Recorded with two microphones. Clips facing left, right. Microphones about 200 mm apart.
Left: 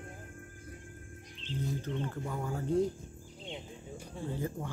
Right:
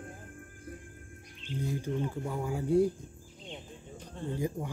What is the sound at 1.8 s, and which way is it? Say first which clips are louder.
Speech: right 3 dB; 10° right (ahead or behind).